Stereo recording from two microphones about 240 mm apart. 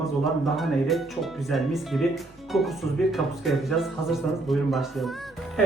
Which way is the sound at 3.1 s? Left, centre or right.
Centre.